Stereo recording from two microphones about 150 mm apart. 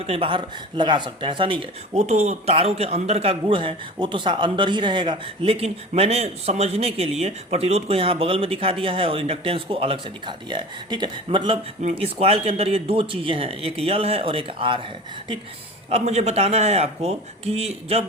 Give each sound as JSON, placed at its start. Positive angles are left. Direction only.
{"t": 0.0, "sound": "speech", "side_deg": -40}
{"t": 2.0, "sound": "speech", "side_deg": -50}
{"t": 15.9, "sound": "speech", "side_deg": -45}